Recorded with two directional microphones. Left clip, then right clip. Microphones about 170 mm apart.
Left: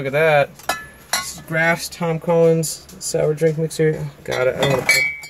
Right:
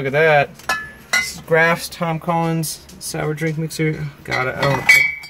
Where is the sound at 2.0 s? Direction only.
45° right (ahead or behind).